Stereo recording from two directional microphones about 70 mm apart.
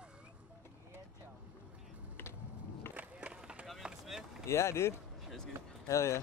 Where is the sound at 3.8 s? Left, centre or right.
Centre.